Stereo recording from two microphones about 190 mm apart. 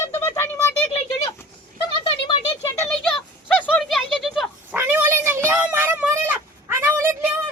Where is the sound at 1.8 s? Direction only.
25° left (ahead or behind).